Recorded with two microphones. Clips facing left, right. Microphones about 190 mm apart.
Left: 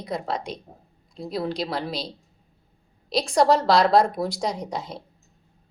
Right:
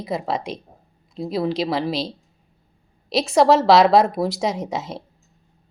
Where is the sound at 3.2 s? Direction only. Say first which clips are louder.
Right 4 dB; 5° right (ahead or behind).